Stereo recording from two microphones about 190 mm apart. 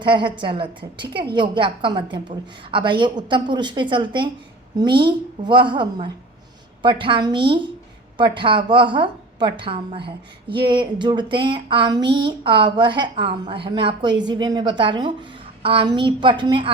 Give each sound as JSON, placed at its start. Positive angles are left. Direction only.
{"t": 0.0, "sound": "a woman's voice", "side_deg": -25}